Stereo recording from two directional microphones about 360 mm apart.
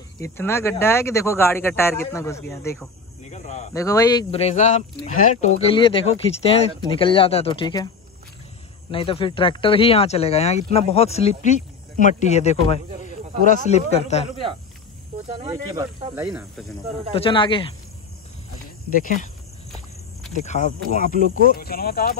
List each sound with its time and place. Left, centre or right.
0.2 s speech: centre
3.3 s speech: centre
8.9 s speech: centre
15.4 s speech: centre
17.1 s speech: centre
18.9 s speech: left
20.3 s speech: centre